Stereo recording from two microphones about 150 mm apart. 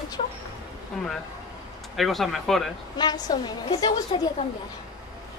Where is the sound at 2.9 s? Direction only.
25° left (ahead or behind).